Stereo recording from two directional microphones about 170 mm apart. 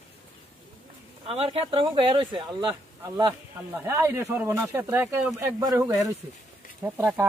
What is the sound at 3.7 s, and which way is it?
Speech, 15° right (ahead or behind).